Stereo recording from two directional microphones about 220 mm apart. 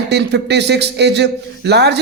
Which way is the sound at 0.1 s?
50° right (ahead or behind).